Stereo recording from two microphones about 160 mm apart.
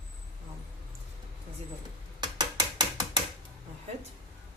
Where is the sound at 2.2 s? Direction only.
25° right (ahead or behind).